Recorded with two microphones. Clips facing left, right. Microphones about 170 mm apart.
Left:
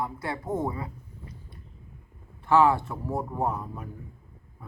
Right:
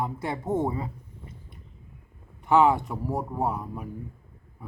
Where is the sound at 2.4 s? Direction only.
15° right (ahead or behind).